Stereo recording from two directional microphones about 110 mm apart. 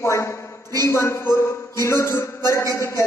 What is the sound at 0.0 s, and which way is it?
A man's voice, 25° left (ahead or behind).